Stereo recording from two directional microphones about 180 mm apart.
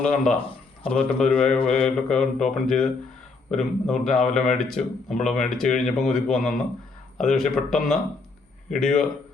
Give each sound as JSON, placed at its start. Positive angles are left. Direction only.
{"t": 0.0, "sound": "speech", "side_deg": 5}
{"t": 0.3, "sound": "a sound", "side_deg": 30}
{"t": 0.9, "sound": "speech", "side_deg": 5}